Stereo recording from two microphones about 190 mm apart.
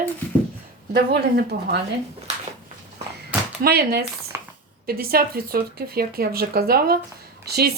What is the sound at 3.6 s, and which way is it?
A woman's voice, 55° right (ahead or behind).